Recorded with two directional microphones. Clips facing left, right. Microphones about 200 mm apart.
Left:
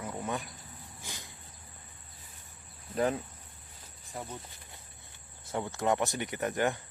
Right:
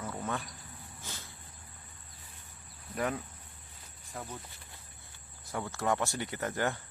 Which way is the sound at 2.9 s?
30° left (ahead or behind).